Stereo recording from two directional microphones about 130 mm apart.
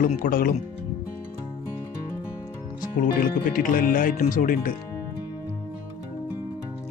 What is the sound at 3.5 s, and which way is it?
A man's voice, 90° left.